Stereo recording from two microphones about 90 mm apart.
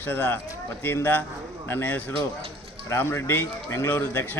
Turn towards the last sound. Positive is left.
turn(degrees=20)  # may be behind; listen again after turning